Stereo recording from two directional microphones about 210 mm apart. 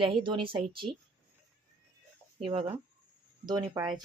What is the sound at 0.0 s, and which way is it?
Speech, 25° right (ahead or behind).